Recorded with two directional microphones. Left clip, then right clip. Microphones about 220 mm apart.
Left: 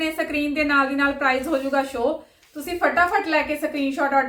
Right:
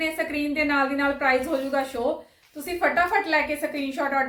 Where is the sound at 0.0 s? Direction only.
15° left (ahead or behind).